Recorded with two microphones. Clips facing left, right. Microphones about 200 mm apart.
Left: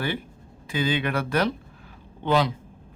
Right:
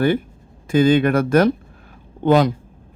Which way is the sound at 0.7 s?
45° right (ahead or behind).